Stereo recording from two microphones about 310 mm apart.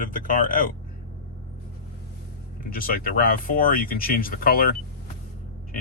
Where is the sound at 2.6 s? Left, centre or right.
Left.